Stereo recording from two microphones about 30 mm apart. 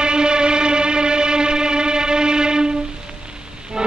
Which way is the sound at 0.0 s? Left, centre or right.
Right.